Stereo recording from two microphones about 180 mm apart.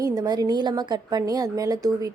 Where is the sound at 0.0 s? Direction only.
20° right (ahead or behind).